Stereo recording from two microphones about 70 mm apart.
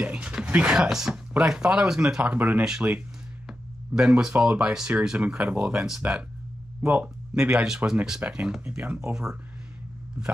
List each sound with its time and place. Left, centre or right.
0.0 s speech: centre
2.3 s speech: right
3.4 s a sound: centre
4.3 s speech: centre
6.8 s speech: right
7.5 s speech: centre
9.1 s speech: centre